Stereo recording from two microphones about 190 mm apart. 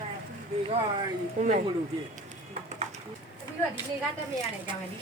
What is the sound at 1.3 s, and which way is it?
Speech, 40° right (ahead or behind).